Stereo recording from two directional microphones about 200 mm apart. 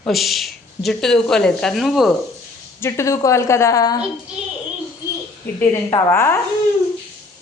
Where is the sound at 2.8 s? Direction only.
15° left (ahead or behind).